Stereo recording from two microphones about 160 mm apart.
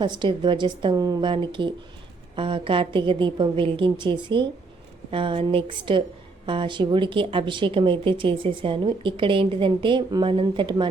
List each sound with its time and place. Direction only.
0.0 s a woman's voice: 30° right (ahead or behind)